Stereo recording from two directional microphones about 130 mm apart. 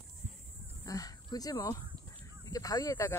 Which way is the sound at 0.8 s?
30° left (ahead or behind).